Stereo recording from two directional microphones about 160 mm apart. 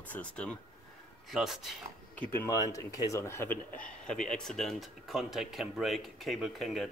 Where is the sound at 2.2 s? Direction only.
15° left (ahead or behind).